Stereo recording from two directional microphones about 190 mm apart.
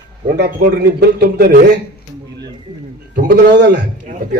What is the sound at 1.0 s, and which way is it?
Speech, 55° right (ahead or behind).